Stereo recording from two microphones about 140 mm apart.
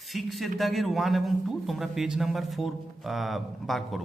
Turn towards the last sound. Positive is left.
turn(degrees=0)  # may be behind; listen again after turning